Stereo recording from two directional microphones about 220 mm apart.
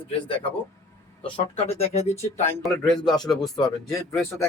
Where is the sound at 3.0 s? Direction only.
20° left (ahead or behind).